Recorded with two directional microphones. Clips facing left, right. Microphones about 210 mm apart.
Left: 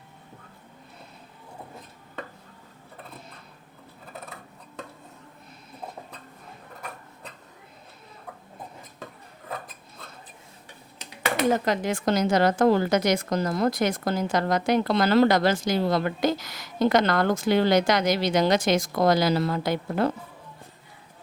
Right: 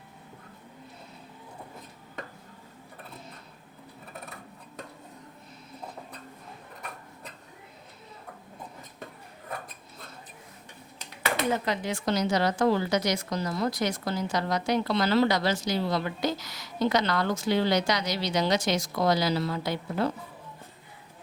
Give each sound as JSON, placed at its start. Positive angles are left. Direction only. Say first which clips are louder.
{"t": 11.5, "sound": "a woman's voice", "louder": "left 4 dB", "side_deg": 45}